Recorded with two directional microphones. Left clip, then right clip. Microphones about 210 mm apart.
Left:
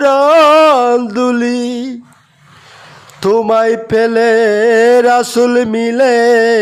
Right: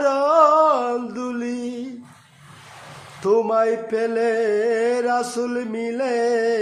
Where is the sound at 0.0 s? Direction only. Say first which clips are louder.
Left 8 dB; 45° left (ahead or behind).